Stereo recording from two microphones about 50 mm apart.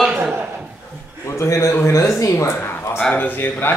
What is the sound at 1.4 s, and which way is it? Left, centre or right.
A man's voice, left.